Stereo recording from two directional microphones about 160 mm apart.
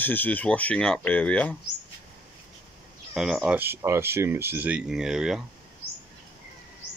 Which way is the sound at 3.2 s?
Centre (ahead or behind).